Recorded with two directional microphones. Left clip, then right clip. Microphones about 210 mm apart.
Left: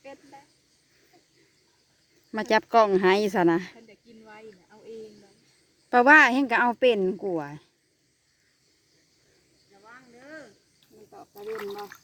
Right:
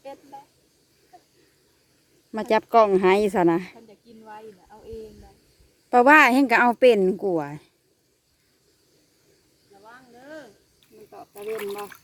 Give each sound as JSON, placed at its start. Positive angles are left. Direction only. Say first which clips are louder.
{"t": 2.3, "sound": "speech", "louder": "right 2 dB", "side_deg": 0}
{"t": 3.8, "sound": "snake", "louder": "right 3 dB", "side_deg": -20}
{"t": 5.9, "sound": "a woman's voice", "louder": "right 2 dB", "side_deg": -5}
{"t": 9.8, "sound": "cricket", "louder": "right 3 dB", "side_deg": 0}
{"t": 11.1, "sound": "a sound", "louder": "right 4 dB", "side_deg": -10}